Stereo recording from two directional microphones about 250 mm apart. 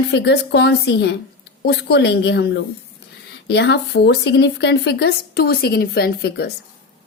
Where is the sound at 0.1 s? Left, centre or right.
Left.